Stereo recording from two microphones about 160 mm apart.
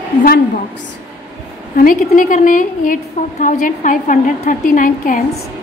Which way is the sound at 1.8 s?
60° left (ahead or behind).